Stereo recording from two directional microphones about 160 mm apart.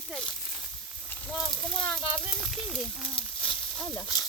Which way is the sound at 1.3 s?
Centre (ahead or behind).